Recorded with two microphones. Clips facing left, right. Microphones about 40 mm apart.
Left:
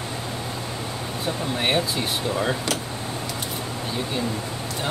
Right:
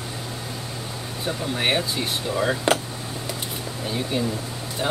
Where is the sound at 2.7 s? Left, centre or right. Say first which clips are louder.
Right 6 dB; right.